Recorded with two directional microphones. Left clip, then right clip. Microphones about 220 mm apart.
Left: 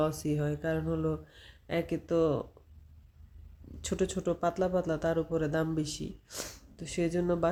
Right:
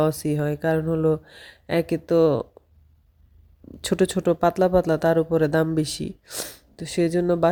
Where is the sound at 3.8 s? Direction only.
35° right (ahead or behind).